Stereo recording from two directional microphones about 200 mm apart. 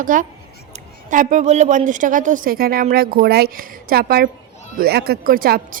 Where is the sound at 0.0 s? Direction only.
40° right (ahead or behind).